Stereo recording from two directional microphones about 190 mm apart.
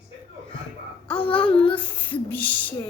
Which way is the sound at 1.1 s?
5° left (ahead or behind).